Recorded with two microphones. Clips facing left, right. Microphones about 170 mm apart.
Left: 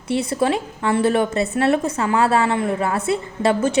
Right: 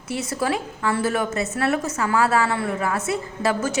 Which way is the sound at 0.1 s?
25° left (ahead or behind).